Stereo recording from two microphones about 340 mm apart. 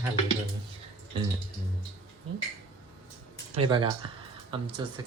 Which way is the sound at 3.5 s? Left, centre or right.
Centre.